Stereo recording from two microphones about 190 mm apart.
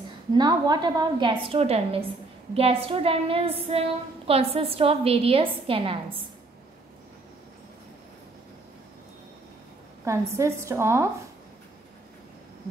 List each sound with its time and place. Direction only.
0.4 s a woman's voice: 20° right (ahead or behind)
10.0 s a woman's voice: 15° right (ahead or behind)